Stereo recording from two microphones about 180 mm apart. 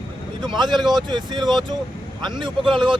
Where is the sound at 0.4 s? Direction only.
25° right (ahead or behind).